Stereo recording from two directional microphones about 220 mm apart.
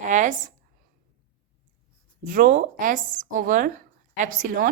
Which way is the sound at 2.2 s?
40° right (ahead or behind).